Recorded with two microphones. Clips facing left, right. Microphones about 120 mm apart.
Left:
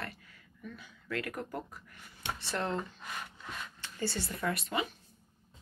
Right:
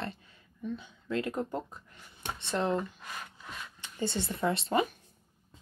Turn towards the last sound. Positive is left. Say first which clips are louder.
# right 4 dB
turn(degrees=-25)  # may be behind; listen again after turning